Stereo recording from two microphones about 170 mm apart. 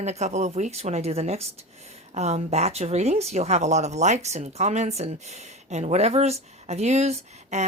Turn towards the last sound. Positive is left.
turn(degrees=-40)  # may be behind; listen again after turning